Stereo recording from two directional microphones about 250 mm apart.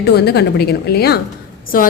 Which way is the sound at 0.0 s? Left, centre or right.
Left.